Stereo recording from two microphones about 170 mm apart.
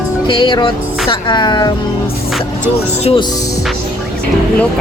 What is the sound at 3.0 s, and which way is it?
Speech, 30° left (ahead or behind).